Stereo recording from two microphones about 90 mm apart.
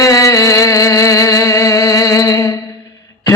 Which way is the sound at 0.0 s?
40° left (ahead or behind).